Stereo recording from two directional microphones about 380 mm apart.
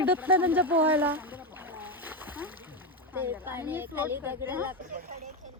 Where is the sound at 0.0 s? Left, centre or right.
Centre.